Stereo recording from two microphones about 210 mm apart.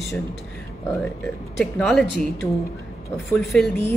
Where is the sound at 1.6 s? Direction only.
Centre (ahead or behind).